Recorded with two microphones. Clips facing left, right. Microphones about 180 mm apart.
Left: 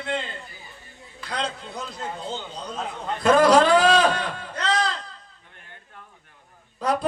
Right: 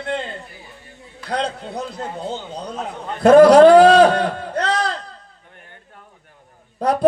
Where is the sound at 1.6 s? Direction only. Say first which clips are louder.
Right 7 dB; 60° right (ahead or behind).